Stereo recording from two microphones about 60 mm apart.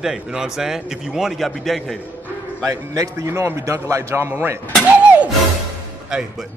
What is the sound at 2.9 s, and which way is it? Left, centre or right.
Speech, right.